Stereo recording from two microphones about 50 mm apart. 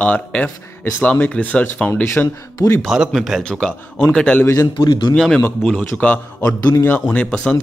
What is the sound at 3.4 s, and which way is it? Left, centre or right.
Speech, centre.